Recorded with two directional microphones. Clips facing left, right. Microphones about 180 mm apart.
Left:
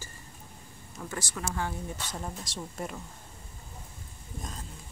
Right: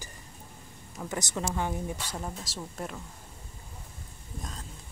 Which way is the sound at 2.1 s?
5° right (ahead or behind).